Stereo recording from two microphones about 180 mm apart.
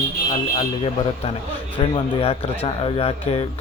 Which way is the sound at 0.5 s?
30° left (ahead or behind).